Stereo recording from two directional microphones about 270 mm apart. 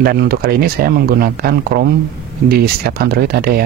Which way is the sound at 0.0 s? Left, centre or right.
Right.